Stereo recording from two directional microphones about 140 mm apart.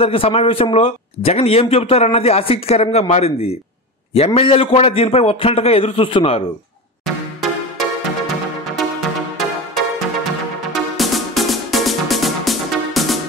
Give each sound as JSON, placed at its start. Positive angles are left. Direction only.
{"t": 0.0, "sound": "a man's voice", "side_deg": 45}
{"t": 10.7, "sound": "music", "side_deg": 0}